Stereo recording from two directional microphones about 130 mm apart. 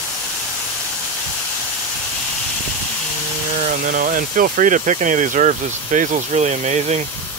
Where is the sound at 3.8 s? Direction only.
90° right; by 7.0 s 60° right (ahead or behind).